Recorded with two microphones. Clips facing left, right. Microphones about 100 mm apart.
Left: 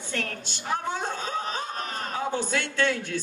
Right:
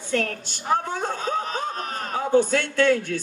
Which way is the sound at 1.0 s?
45° right (ahead or behind).